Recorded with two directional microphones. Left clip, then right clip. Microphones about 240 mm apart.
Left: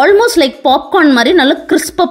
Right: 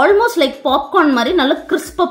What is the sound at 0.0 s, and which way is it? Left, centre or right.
A woman's voice, left.